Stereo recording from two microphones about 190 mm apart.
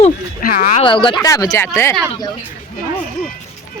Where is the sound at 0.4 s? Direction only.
45° left (ahead or behind).